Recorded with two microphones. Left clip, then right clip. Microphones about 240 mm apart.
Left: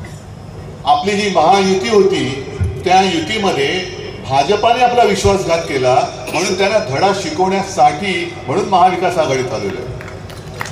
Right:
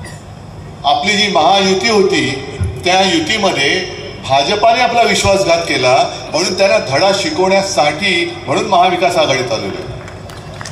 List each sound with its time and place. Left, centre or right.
0.8 s a man's voice: right